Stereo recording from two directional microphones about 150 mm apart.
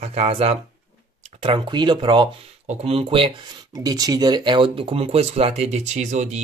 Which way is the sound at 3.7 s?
25° right (ahead or behind).